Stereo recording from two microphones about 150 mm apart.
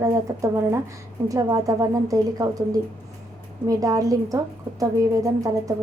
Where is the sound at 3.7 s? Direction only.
25° right (ahead or behind).